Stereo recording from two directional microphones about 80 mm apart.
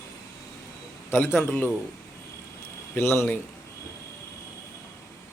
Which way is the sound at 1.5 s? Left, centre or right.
Centre.